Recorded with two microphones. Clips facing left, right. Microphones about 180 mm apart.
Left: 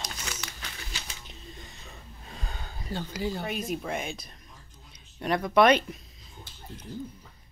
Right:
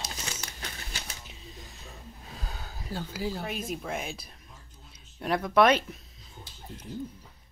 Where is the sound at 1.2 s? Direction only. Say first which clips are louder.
Left 1 dB; 5° right (ahead or behind).